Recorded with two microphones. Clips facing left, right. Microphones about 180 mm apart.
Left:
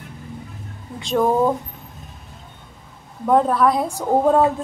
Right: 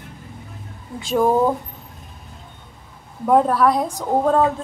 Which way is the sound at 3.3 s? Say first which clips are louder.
Right 1 dB; centre (ahead or behind).